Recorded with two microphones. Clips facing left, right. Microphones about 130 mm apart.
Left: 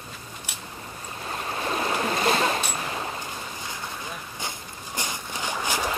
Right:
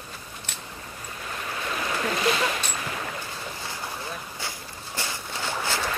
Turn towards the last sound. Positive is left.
turn(degrees=15)  # may be behind; listen again after turning